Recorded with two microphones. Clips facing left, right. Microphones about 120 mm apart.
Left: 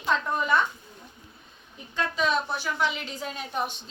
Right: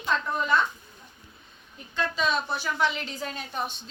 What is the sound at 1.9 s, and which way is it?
A woman's voice, 10° left (ahead or behind).